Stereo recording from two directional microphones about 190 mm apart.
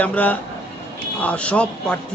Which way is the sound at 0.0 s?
5° left (ahead or behind).